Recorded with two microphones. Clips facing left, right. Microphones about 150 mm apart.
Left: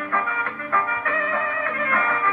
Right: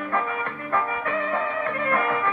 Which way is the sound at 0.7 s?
20° right (ahead or behind).